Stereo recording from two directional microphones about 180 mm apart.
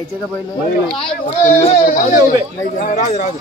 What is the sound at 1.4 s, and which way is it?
Speech, 35° left (ahead or behind).